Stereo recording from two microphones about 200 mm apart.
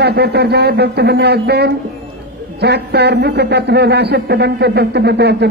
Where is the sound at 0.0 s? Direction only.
55° right (ahead or behind).